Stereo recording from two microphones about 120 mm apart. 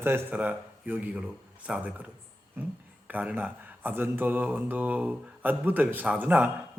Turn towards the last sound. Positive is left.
turn(degrees=-15)  # may be behind; listen again after turning